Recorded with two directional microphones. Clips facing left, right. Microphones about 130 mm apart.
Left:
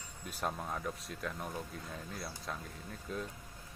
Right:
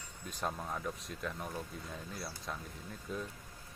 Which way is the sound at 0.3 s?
5° left (ahead or behind).